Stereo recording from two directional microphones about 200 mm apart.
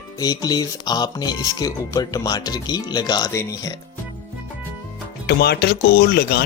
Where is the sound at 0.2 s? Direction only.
20° left (ahead or behind).